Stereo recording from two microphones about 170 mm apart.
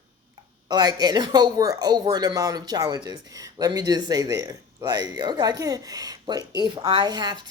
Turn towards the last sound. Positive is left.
turn(degrees=-25)  # may be behind; listen again after turning